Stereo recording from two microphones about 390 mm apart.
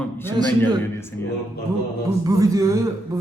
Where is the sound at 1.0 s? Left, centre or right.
Centre.